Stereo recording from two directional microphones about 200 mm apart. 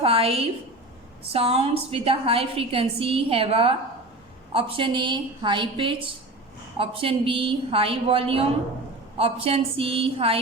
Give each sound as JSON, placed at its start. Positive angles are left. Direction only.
{"t": 0.0, "sound": "a woman's voice", "side_deg": -30}